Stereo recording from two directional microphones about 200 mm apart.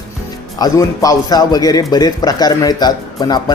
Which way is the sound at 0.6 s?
20° left (ahead or behind).